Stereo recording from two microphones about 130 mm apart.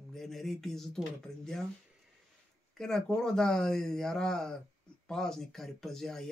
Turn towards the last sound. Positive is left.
turn(degrees=5)  # may be behind; listen again after turning